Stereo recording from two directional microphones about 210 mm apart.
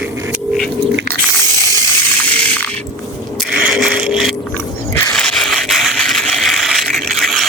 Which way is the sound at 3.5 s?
5° right (ahead or behind).